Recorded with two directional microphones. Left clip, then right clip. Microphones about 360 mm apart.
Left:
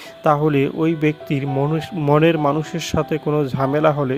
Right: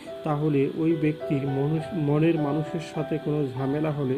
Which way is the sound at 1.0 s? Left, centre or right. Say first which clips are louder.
Left 6 dB; left.